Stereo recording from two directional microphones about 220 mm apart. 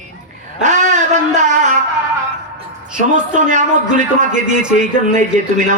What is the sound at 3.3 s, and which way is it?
Speech, 35° right (ahead or behind).